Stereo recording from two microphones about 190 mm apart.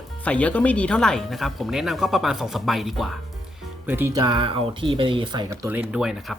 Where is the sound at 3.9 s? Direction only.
15° right (ahead or behind).